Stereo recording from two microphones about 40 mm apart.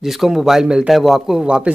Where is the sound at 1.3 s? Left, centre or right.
Centre.